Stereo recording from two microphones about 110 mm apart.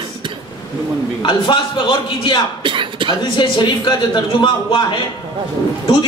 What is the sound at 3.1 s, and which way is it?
A man's voice, 40° left (ahead or behind).